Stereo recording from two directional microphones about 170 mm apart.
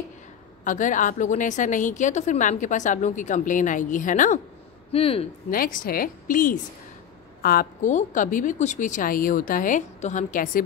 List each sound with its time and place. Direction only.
0.7 s a woman's voice: 50° left (ahead or behind)
4.9 s speech: 35° left (ahead or behind)
5.5 s a woman's voice: 55° left (ahead or behind)